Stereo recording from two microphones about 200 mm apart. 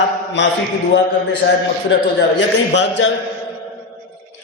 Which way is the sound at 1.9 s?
70° left (ahead or behind).